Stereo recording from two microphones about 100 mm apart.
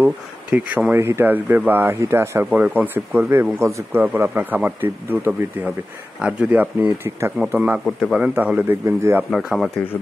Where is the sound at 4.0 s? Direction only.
15° right (ahead or behind).